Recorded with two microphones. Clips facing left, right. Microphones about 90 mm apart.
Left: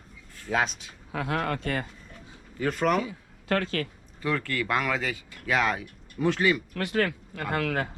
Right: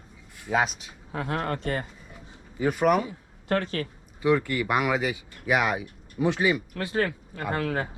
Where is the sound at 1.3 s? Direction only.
25° right (ahead or behind).